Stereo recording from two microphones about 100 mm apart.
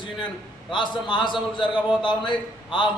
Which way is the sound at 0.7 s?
50° left (ahead or behind).